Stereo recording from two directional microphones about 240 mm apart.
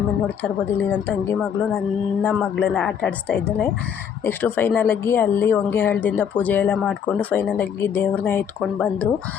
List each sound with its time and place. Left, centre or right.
2.3 s speech: centre